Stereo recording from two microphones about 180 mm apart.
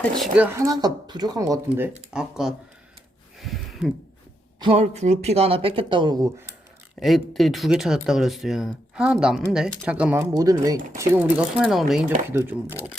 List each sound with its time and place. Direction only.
0.2 s speech: 10° right (ahead or behind)
2.1 s speech: 5° right (ahead or behind)
3.3 s a sound: centre (ahead or behind)
4.6 s speech: 35° right (ahead or behind); by 6.5 s 20° right (ahead or behind)
7.0 s speech: centre (ahead or behind)
10.3 s speech: 20° right (ahead or behind)